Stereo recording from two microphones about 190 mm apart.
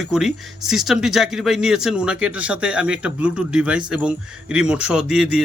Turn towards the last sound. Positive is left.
turn(degrees=-5)  # may be behind; listen again after turning